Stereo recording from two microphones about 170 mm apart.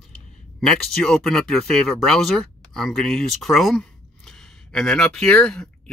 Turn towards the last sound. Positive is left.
turn(degrees=5)  # may be behind; listen again after turning